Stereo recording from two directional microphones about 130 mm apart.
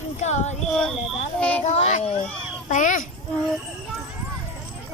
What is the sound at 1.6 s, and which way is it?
Speech, 60° left (ahead or behind).